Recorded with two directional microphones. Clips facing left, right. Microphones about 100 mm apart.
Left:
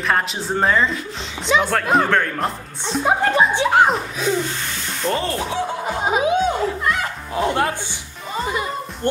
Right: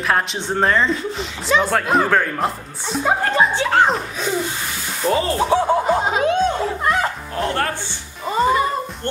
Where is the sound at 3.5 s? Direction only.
15° left (ahead or behind).